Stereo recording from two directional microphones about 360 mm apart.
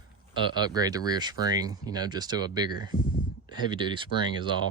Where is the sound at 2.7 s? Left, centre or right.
Left.